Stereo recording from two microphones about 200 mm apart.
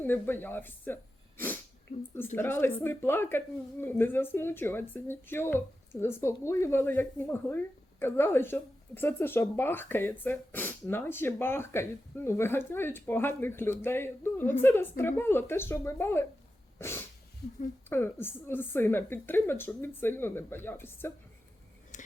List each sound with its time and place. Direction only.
0.0 s speech: 10° left (ahead or behind)
2.1 s speech: 10° left (ahead or behind)
16.7 s cat: 10° left (ahead or behind)
17.8 s speech: 10° left (ahead or behind)
21.9 s a sound: 40° left (ahead or behind)